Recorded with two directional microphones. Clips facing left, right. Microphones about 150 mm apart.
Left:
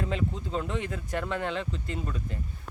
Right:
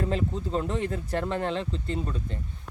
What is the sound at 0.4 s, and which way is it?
Speech, 35° right (ahead or behind).